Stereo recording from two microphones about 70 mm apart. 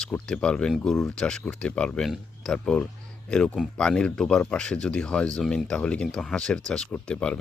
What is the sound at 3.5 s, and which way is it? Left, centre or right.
Speech, centre.